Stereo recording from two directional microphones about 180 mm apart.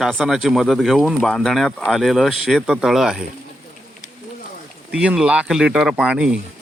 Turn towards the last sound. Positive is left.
turn(degrees=-5)  # may be behind; listen again after turning